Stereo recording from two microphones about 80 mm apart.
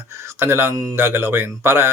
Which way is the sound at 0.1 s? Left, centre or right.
Right.